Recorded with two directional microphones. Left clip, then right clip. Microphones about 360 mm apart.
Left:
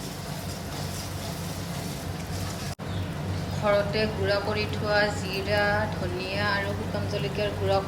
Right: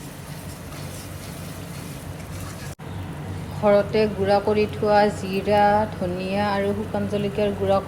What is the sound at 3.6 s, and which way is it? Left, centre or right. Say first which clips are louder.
Speech: right 6 dB; centre.